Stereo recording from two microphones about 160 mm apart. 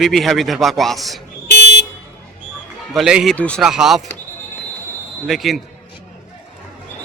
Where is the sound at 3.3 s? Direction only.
5° left (ahead or behind).